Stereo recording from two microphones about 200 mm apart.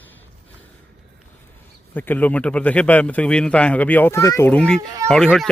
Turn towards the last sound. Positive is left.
turn(degrees=0)  # may be behind; listen again after turning